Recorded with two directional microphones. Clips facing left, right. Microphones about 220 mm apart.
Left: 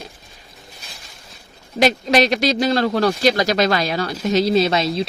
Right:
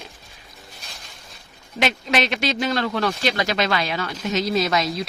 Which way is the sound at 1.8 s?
40° left (ahead or behind).